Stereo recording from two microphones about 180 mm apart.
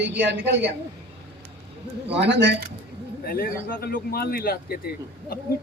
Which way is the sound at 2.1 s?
70° right (ahead or behind).